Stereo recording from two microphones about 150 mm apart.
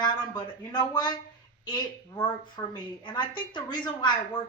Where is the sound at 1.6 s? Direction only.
30° left (ahead or behind).